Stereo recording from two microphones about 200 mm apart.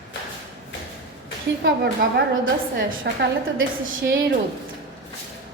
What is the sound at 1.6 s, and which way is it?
Speech, 55° right (ahead or behind).